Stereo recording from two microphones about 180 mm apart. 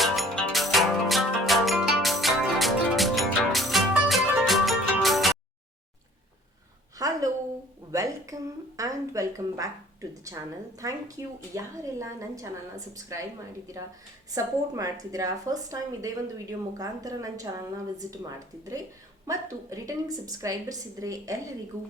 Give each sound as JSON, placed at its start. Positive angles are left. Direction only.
{"t": 0.0, "sound": "music", "side_deg": 0}
{"t": 7.0, "sound": "a sound", "side_deg": -20}
{"t": 7.9, "sound": "a woman's voice", "side_deg": -20}
{"t": 14.3, "sound": "a woman's voice", "side_deg": -20}